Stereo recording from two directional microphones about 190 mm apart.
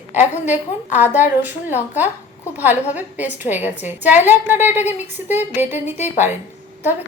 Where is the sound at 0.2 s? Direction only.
10° right (ahead or behind).